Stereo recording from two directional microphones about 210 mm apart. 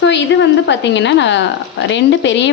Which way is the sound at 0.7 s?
55° left (ahead or behind).